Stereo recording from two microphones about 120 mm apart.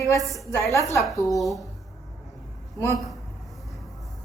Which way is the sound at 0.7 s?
25° left (ahead or behind).